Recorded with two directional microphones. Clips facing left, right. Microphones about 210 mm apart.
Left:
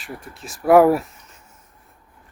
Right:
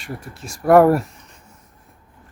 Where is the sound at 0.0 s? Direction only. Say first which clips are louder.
Right 3 dB; centre (ahead or behind).